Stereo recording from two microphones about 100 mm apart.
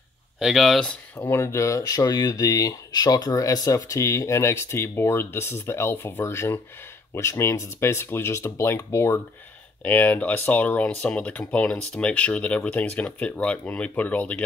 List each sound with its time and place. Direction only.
0.4 s speech: centre (ahead or behind)
1.1 s speech: 25° left (ahead or behind)